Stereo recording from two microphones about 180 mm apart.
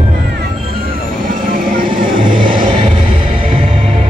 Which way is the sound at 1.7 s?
50° right (ahead or behind).